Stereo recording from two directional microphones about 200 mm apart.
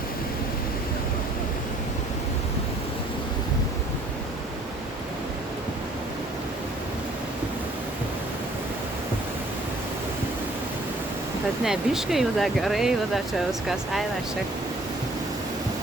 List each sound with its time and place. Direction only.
11.6 s speech: centre (ahead or behind)